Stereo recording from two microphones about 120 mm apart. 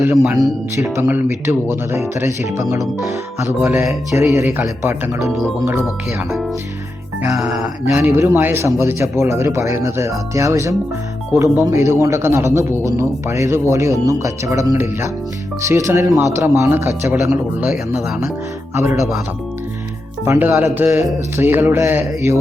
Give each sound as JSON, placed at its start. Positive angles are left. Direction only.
{"t": 0.3, "sound": "speech", "side_deg": -30}
{"t": 0.9, "sound": "speech", "side_deg": -20}
{"t": 7.3, "sound": "speech", "side_deg": -5}
{"t": 7.9, "sound": "speech", "side_deg": -20}
{"t": 18.7, "sound": "speech", "side_deg": -20}
{"t": 20.2, "sound": "speech", "side_deg": -20}